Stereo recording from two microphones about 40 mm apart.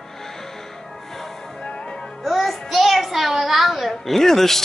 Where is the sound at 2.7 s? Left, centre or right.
Centre.